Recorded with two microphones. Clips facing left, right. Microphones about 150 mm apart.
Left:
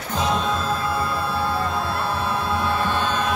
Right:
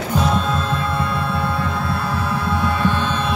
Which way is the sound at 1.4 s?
30° left (ahead or behind).